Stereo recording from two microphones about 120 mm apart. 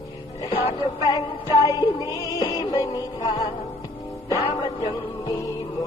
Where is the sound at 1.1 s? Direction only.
35° left (ahead or behind).